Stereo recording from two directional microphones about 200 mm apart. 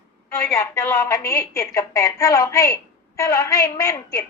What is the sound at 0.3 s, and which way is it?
A woman's voice, 15° left (ahead or behind).